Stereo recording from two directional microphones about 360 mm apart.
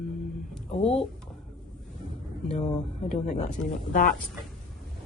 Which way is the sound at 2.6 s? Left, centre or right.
Centre.